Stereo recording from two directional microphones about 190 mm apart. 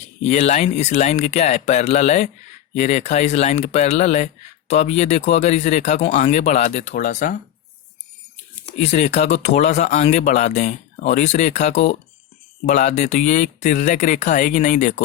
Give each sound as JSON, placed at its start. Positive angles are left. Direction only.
{"t": 0.2, "sound": "speech", "side_deg": 35}
{"t": 8.8, "sound": "speech", "side_deg": 35}